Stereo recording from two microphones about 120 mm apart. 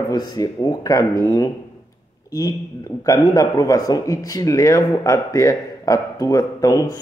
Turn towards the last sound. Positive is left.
turn(degrees=30)  # may be behind; listen again after turning